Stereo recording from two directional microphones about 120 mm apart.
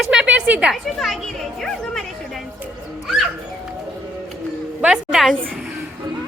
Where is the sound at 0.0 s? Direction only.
5° right (ahead or behind).